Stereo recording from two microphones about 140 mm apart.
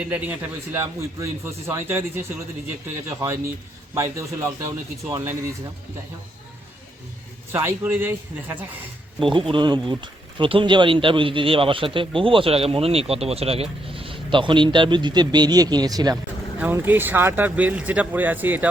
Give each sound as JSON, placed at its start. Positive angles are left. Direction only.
{"t": 0.0, "sound": "a man's voice", "side_deg": -10}
{"t": 7.5, "sound": "a man's voice", "side_deg": -15}
{"t": 9.2, "sound": "speech", "side_deg": -40}
{"t": 16.6, "sound": "a man's voice", "side_deg": -15}